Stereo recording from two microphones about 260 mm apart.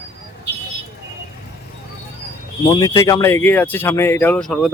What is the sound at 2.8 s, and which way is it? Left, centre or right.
Speech, centre.